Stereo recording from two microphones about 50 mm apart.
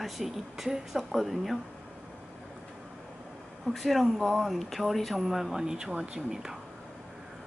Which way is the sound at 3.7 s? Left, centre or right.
Centre.